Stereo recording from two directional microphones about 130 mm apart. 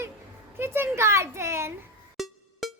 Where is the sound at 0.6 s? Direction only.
20° right (ahead or behind).